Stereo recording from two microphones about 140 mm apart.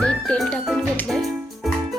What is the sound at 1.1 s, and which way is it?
Music, centre (ahead or behind).